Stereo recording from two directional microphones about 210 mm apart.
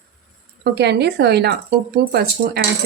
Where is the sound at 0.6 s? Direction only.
50° right (ahead or behind).